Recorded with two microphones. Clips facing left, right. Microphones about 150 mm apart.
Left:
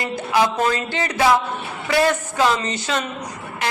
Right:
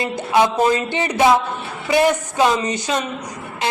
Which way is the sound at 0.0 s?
20° right (ahead or behind).